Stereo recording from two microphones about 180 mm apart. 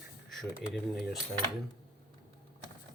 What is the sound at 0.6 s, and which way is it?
Speech, centre (ahead or behind).